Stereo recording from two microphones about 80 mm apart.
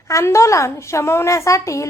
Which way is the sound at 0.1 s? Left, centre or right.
Left.